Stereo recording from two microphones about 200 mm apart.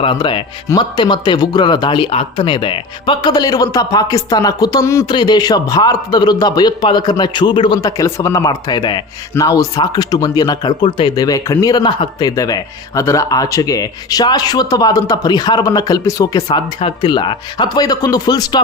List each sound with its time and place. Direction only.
0.0 s speech: 25° left (ahead or behind)